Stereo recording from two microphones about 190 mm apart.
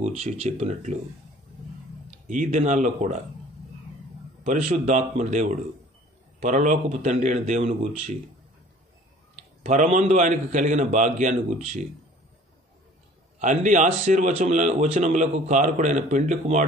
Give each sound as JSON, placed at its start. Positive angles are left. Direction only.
{"t": 0.0, "sound": "speech", "side_deg": -35}
{"t": 2.2, "sound": "speech", "side_deg": -40}
{"t": 4.6, "sound": "speech", "side_deg": -35}
{"t": 9.6, "sound": "speech", "side_deg": -40}
{"t": 13.4, "sound": "speech", "side_deg": -40}